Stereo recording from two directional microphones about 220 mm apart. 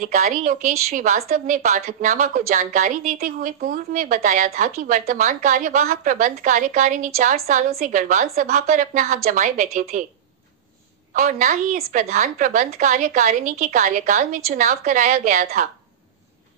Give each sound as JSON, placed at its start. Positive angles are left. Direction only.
{"t": 0.0, "sound": "a woman's voice", "side_deg": -40}
{"t": 11.1, "sound": "a woman's voice", "side_deg": -40}